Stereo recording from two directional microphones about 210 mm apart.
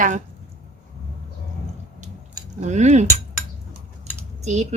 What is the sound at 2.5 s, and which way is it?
Speech, 35° right (ahead or behind).